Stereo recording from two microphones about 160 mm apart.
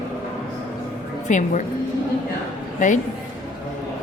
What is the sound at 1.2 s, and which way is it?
Speech, 50° left (ahead or behind).